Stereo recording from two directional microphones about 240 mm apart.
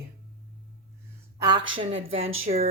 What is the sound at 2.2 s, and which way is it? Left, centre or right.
Speech, right.